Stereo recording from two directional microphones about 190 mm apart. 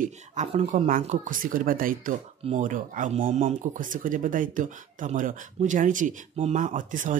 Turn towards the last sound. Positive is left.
turn(degrees=-45)  # may be behind; listen again after turning